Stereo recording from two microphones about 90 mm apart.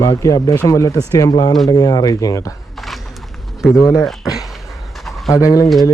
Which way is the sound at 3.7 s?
35° left (ahead or behind).